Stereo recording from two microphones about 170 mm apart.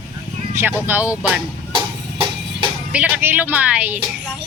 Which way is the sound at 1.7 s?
30° right (ahead or behind).